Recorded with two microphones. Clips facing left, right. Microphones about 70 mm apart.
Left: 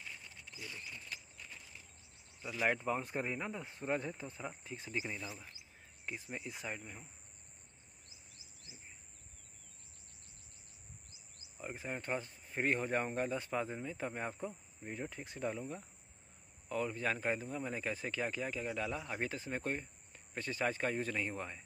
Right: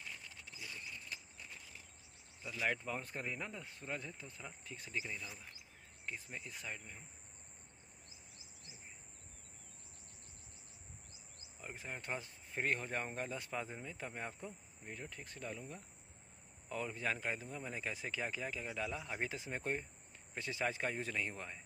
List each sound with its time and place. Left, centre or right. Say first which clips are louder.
2.4 s speech: left 4 dB; left
6.0 s speech: left 3 dB; centre
11.6 s speech: left 5 dB; centre
16.6 s speech: left 4 dB; centre